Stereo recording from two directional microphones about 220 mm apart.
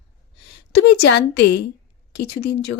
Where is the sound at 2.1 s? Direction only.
50° left (ahead or behind).